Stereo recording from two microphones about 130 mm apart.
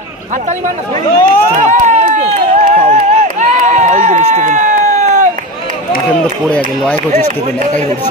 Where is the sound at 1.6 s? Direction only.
70° right (ahead or behind).